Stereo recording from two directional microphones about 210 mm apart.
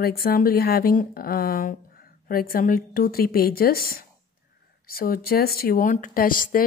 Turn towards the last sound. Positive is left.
turn(degrees=40)  # may be behind; listen again after turning